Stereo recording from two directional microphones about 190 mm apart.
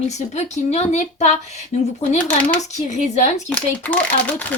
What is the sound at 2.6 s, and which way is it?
Speech, 40° left (ahead or behind).